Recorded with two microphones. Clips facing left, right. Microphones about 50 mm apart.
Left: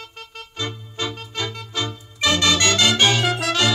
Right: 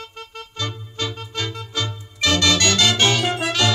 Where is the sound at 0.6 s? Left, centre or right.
Left.